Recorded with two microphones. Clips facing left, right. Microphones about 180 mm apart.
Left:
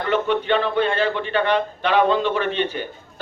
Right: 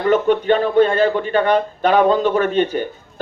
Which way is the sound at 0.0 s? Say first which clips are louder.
Right 6 dB; 45° right (ahead or behind).